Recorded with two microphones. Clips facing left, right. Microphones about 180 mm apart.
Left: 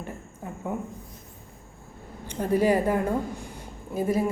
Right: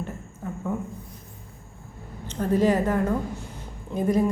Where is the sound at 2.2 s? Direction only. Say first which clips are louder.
Right 1 dB; 10° left (ahead or behind).